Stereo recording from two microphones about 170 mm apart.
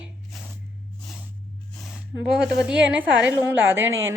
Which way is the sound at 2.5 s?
5° right (ahead or behind).